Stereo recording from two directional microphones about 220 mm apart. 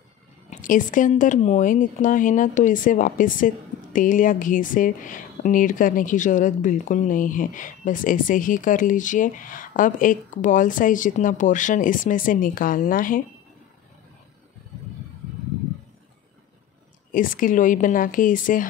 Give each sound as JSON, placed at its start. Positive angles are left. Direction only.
{"t": 0.5, "sound": "speech", "side_deg": 35}
{"t": 17.1, "sound": "speech", "side_deg": 40}